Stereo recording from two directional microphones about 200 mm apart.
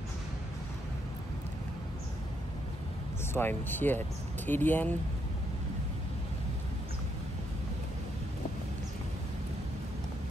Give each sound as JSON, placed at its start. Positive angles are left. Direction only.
{"t": 3.3, "sound": "speech", "side_deg": 10}